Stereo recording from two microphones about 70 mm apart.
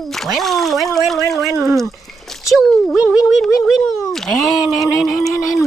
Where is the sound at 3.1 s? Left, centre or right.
Centre.